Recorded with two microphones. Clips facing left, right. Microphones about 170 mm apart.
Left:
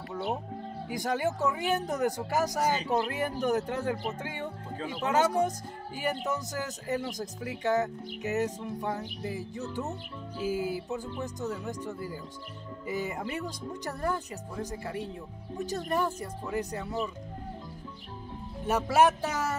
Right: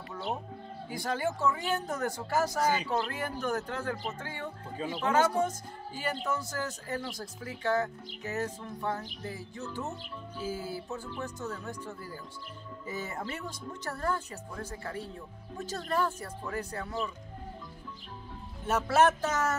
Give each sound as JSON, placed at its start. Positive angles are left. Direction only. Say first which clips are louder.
{"t": 0.1, "sound": "music", "louder": "left 3 dB", "side_deg": 15}
{"t": 0.8, "sound": "speech", "louder": "left 2 dB", "side_deg": 15}
{"t": 18.7, "sound": "speech", "louder": "left 1 dB", "side_deg": 10}